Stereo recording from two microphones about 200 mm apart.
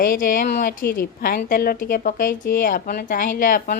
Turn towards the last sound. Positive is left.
turn(degrees=45)  # may be behind; listen again after turning